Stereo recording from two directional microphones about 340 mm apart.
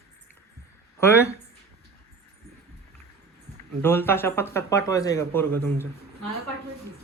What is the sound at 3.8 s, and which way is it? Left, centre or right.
Speech, centre.